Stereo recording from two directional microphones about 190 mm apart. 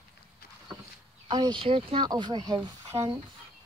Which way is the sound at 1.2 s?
25° right (ahead or behind).